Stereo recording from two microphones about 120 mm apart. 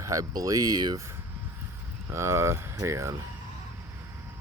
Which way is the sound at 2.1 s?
25° right (ahead or behind).